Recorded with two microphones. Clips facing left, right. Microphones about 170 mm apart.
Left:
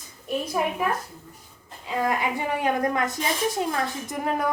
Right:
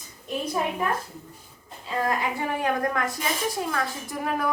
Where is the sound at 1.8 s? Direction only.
15° left (ahead or behind).